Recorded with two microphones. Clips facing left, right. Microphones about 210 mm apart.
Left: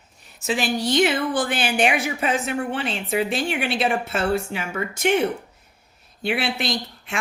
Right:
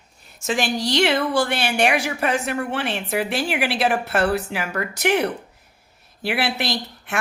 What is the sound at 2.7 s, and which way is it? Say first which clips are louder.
A woman's voice: even; 70° right (ahead or behind).